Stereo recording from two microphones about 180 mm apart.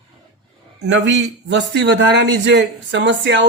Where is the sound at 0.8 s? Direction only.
75° right (ahead or behind).